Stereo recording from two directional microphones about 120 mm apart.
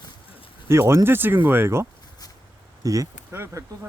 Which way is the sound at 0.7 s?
20° right (ahead or behind).